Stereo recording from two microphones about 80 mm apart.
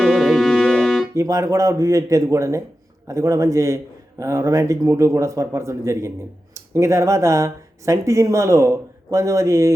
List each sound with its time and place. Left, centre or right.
0.0 s music: centre
1.1 s speech: right